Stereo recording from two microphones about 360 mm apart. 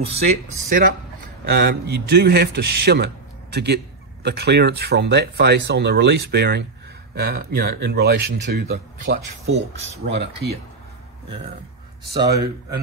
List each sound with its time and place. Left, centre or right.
0.0 s speech: centre
11.2 s speech: centre